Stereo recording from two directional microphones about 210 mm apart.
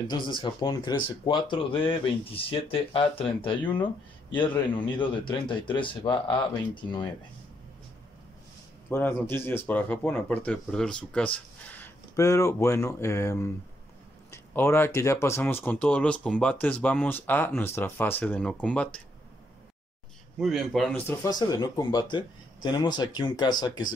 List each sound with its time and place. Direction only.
0.1 s speech: 20° left (ahead or behind)
8.9 s speech: 10° left (ahead or behind)
20.3 s speech: centre (ahead or behind); by 23.9 s 20° left (ahead or behind)